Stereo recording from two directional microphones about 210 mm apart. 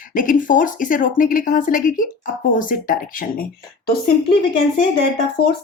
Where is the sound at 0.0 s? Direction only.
40° left (ahead or behind).